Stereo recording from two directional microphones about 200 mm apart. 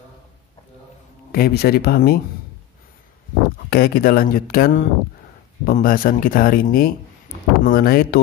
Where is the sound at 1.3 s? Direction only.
50° left (ahead or behind).